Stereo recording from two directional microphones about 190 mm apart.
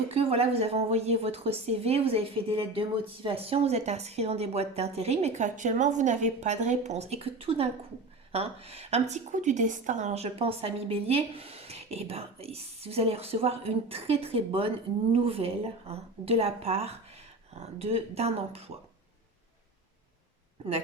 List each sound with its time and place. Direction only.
0.1 s a woman's voice: 30° right (ahead or behind)